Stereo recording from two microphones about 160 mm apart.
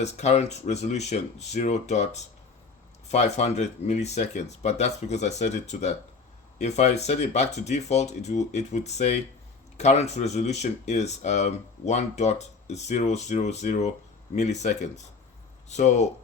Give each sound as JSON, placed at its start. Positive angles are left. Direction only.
{"t": 0.0, "sound": "speech", "side_deg": 45}